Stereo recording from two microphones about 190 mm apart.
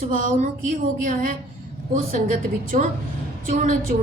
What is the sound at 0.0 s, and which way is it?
A woman's voice, 45° right (ahead or behind).